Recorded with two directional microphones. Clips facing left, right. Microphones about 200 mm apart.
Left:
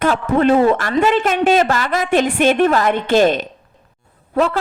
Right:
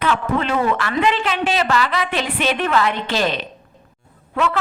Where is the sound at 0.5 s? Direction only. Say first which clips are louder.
Left 6 dB; 35° left (ahead or behind).